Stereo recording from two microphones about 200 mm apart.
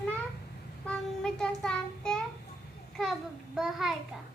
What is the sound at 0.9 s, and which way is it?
Child singing, 5° left (ahead or behind).